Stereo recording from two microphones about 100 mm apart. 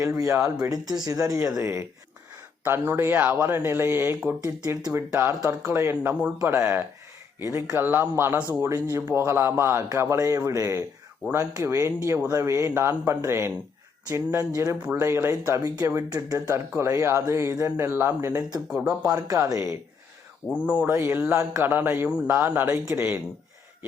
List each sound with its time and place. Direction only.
0.2 s speech: 30° right (ahead or behind)
20.5 s speech: 10° right (ahead or behind)